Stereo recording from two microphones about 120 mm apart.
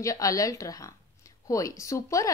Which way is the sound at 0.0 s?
30° left (ahead or behind).